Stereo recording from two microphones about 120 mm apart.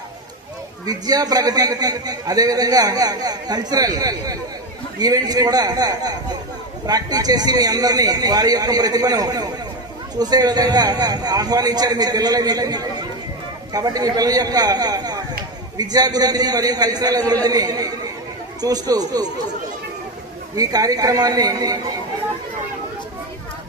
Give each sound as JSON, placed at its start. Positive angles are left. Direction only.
{"t": 0.9, "sound": "a man's voice", "side_deg": -30}
{"t": 20.6, "sound": "a man's voice", "side_deg": -30}